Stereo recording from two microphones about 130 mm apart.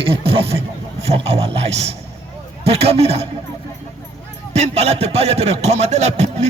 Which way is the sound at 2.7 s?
50° right (ahead or behind).